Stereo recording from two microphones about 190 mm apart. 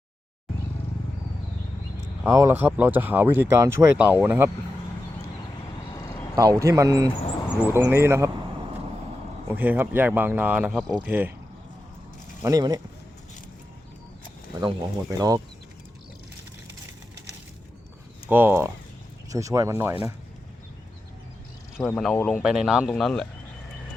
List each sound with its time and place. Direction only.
2.2 s speech: 15° right (ahead or behind)
5.9 s a sound: 20° left (ahead or behind)
6.3 s speech: 20° right (ahead or behind)
9.5 s speech: 10° right (ahead or behind)
12.4 s speech: 20° right (ahead or behind)
15.1 s speech: 20° right (ahead or behind)
18.3 s speech: 10° right (ahead or behind)
21.8 s speech: 5° left (ahead or behind)